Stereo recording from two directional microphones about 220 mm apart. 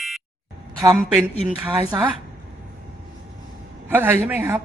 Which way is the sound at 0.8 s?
15° right (ahead or behind).